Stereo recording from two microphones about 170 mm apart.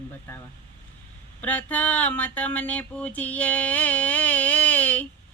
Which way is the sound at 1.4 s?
10° left (ahead or behind).